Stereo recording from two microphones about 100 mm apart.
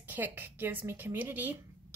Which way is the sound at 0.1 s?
20° right (ahead or behind).